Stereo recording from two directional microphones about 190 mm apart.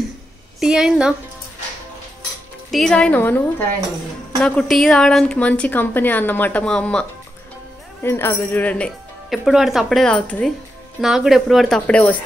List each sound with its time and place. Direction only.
0.6 s speech: 5° right (ahead or behind)
2.7 s a woman's voice: 5° left (ahead or behind)